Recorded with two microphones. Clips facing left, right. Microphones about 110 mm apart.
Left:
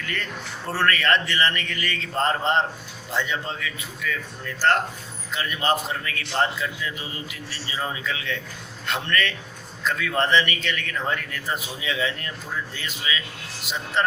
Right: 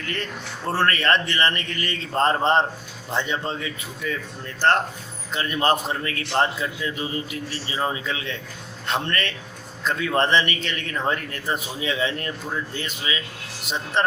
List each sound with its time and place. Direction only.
0.7 s a man's voice: 30° right (ahead or behind)